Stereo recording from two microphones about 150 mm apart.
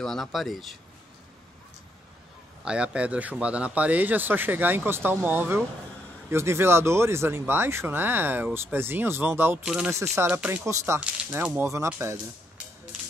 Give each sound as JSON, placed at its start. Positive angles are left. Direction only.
{"t": 0.0, "sound": "speech", "side_deg": 0}
{"t": 2.6, "sound": "speech", "side_deg": -5}